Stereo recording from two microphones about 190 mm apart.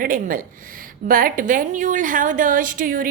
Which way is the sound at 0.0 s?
45° right (ahead or behind).